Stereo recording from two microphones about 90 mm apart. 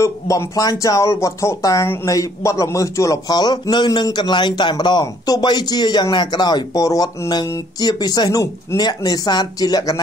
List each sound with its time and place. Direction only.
0.0 s a man's voice: 35° left (ahead or behind)